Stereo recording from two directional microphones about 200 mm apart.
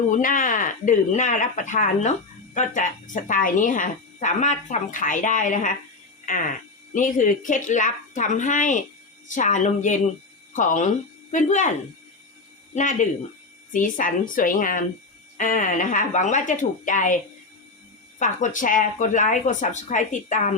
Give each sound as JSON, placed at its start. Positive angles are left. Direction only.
{"t": 0.1, "sound": "a woman's voice", "side_deg": 40}
{"t": 12.7, "sound": "a woman's voice", "side_deg": 35}
{"t": 18.2, "sound": "a woman's voice", "side_deg": 40}